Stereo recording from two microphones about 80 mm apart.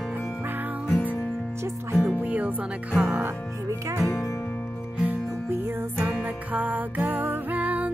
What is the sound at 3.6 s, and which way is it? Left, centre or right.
Music, right.